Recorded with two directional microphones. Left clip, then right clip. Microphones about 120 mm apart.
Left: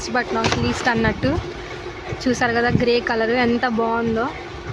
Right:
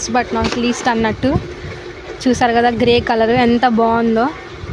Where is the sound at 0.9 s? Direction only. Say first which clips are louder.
Right 3 dB; 35° right (ahead or behind); by 4.3 s 60° right (ahead or behind).